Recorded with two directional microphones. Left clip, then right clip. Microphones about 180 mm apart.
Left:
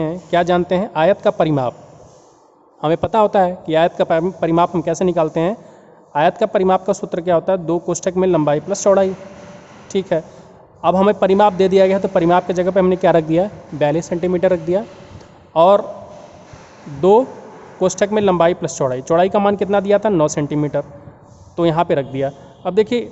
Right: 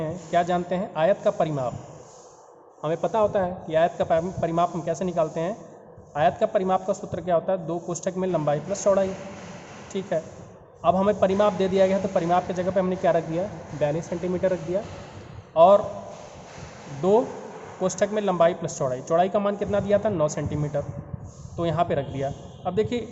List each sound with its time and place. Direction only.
0.0 s a man's voice: 65° left (ahead or behind)
2.8 s a man's voice: 65° left (ahead or behind)
17.0 s a man's voice: 55° left (ahead or behind)